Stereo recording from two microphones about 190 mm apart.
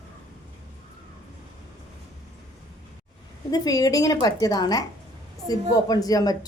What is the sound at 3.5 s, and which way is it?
Speech, 20° left (ahead or behind).